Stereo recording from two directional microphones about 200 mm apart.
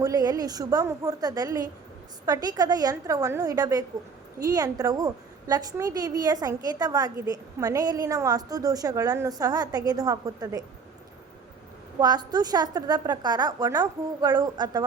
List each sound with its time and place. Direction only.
0.0 s a woman's voice: 20° right (ahead or behind)
11.9 s a woman's voice: 20° right (ahead or behind)